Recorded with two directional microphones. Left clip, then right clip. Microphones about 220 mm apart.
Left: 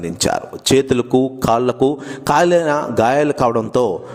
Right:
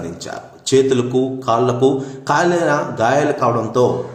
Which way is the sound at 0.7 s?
40° left (ahead or behind).